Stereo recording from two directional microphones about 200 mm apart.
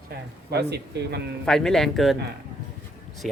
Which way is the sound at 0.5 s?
55° right (ahead or behind).